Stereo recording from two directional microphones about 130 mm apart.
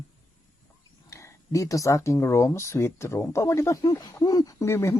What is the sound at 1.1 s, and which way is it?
Speech, 25° left (ahead or behind).